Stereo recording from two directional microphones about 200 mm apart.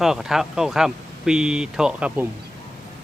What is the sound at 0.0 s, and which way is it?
Speech, centre (ahead or behind).